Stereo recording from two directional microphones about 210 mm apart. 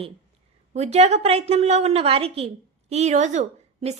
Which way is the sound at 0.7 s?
30° right (ahead or behind).